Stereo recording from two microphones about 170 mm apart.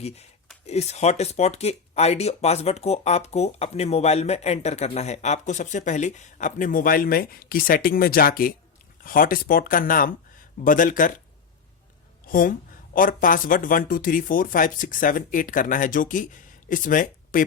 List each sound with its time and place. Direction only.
0.7 s speech: 40° left (ahead or behind)
12.3 s speech: 55° left (ahead or behind)